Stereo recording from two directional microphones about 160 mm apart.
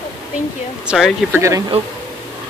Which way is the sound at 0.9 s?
Centre (ahead or behind).